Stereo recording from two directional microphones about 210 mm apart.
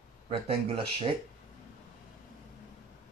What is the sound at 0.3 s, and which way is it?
Speech, 25° right (ahead or behind).